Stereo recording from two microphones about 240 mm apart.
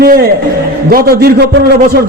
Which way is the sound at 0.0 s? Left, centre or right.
Right.